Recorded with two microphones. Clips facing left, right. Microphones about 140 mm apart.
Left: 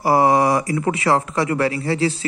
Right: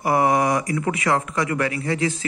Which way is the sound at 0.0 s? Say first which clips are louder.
Left 3 dB; 30° left (ahead or behind).